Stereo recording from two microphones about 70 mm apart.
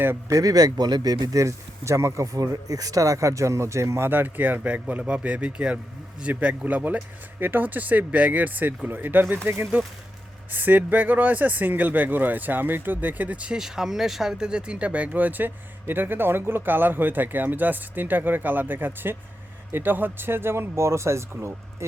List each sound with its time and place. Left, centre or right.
0.3 s speech: right; by 13.6 s centre
13.6 s speech: centre; by 22.0 s right